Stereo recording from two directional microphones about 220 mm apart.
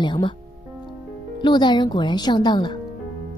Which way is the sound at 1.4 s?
20° left (ahead or behind).